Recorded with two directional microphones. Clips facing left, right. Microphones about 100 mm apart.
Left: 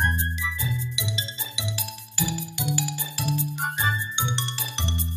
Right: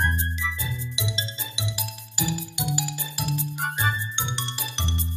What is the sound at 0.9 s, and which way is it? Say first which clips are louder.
Music: right 1 dB; 25° right (ahead or behind).